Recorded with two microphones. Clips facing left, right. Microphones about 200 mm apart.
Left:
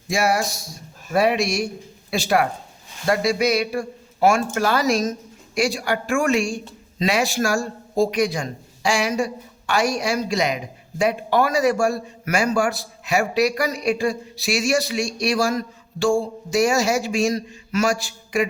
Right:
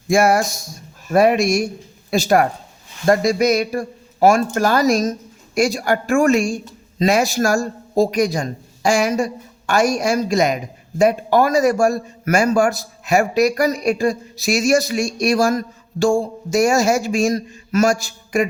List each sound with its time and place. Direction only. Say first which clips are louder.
0.1 s a man's voice: right 6 dB; 50° right (ahead or behind)